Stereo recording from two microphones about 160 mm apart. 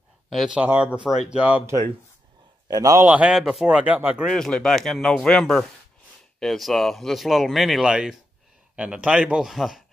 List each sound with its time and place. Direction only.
0.3 s speech: centre (ahead or behind)
2.7 s a man's voice: 20° right (ahead or behind)
3.1 s speech: 5° right (ahead or behind)
4.3 s speech: 5° left (ahead or behind)